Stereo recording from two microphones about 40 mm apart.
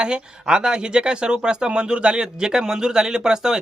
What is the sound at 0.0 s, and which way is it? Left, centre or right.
Speech, right.